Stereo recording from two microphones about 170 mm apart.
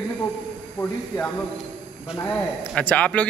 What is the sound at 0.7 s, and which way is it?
Speech, 10° left (ahead or behind).